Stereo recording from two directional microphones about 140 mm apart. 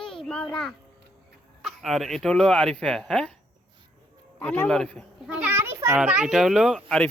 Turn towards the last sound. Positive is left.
turn(degrees=0)  # may be behind; listen again after turning